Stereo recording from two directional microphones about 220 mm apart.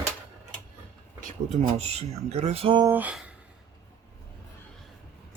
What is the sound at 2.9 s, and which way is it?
Speech, 5° right (ahead or behind).